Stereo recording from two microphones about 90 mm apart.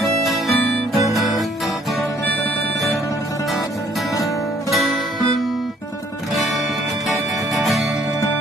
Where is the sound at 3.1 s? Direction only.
40° left (ahead or behind).